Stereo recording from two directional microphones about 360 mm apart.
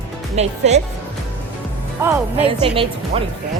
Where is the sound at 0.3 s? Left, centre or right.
Centre.